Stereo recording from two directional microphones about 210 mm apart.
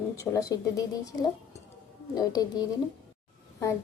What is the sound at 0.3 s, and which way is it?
Speech, 15° left (ahead or behind).